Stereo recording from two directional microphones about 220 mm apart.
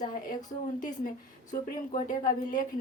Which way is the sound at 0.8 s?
35° left (ahead or behind).